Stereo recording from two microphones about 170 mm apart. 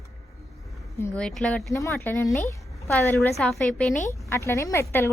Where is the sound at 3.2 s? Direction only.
Centre (ahead or behind).